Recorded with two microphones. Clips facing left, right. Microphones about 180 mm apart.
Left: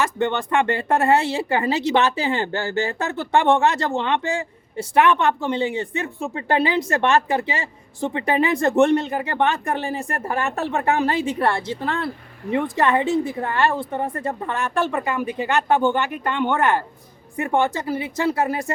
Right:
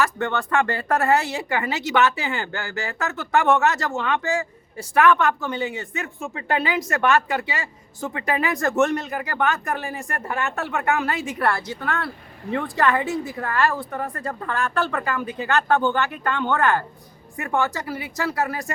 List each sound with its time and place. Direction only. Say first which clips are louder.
0.0 s speech: left 2 dB; 25° left (ahead or behind)